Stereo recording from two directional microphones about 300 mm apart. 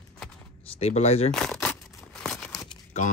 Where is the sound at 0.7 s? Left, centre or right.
Left.